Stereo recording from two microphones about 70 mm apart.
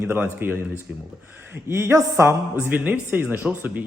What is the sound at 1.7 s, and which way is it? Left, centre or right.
Speech, right.